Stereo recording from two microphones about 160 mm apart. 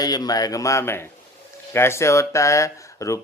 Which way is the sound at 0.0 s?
25° left (ahead or behind).